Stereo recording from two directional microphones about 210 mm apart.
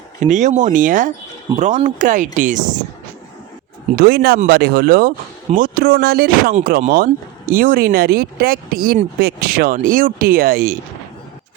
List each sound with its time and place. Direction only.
0.2 s speech: 35° right (ahead or behind)
3.9 s speech: 45° right (ahead or behind)